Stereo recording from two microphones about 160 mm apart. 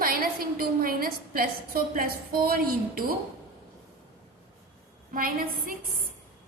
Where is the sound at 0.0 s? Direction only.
65° right (ahead or behind).